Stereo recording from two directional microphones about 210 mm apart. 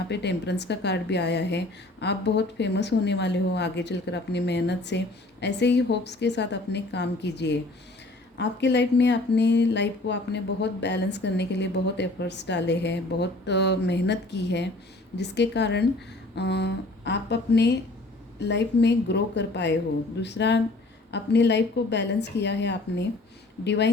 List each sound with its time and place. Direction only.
0.1 s speech: 55° left (ahead or behind)